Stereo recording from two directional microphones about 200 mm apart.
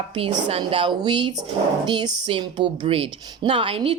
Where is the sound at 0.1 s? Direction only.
25° right (ahead or behind).